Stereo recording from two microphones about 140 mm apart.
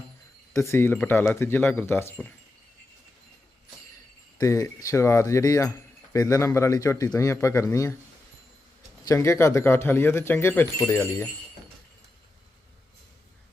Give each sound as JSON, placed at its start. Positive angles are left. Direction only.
{"t": 0.5, "sound": "speech", "side_deg": 20}
{"t": 4.4, "sound": "speech", "side_deg": 25}
{"t": 9.0, "sound": "speech", "side_deg": 20}